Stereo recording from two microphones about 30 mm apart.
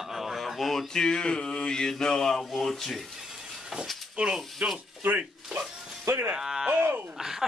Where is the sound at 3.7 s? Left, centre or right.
Right.